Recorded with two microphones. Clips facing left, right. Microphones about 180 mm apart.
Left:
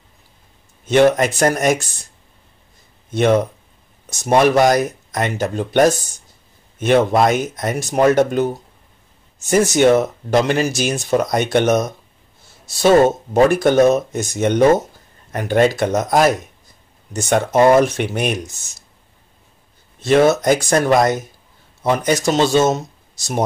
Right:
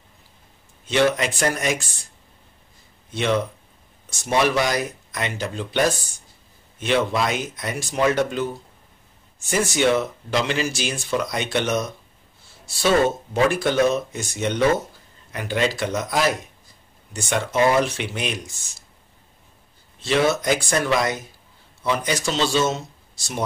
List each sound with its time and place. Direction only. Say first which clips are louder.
0.8 s speech: left 7 dB; 45° left (ahead or behind)
3.1 s speech: left 7 dB; 45° left (ahead or behind)
20.1 s speech: left 7 dB; 50° left (ahead or behind)